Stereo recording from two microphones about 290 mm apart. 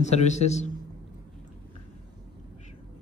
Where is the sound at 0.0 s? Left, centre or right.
Left.